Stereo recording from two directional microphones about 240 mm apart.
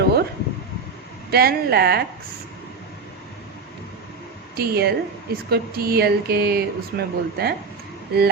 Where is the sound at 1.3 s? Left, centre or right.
Right.